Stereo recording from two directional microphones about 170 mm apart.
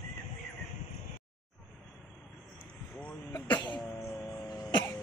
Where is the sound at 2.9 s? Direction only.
10° left (ahead or behind).